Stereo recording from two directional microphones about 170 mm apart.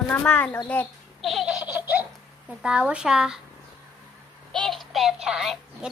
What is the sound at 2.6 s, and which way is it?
Speech, 5° right (ahead or behind).